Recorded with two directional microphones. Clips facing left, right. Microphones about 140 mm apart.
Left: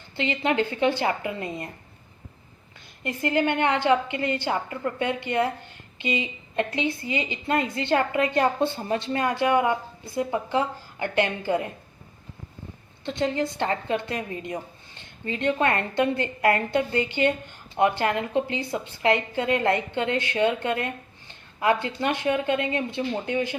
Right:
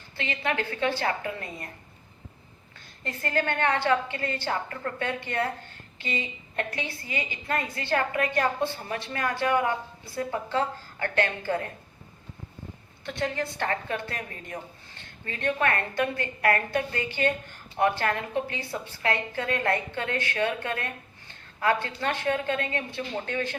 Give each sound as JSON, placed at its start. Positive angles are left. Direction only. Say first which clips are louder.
{"t": 0.2, "sound": "a woman's voice", "louder": "left 6 dB", "side_deg": 25}
{"t": 3.0, "sound": "a woman's voice", "louder": "left 5 dB", "side_deg": 15}
{"t": 13.1, "sound": "a woman's voice", "louder": "left 5 dB", "side_deg": 20}